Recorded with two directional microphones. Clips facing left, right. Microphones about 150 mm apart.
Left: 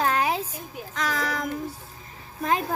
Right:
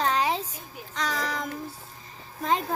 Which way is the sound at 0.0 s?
5° left (ahead or behind).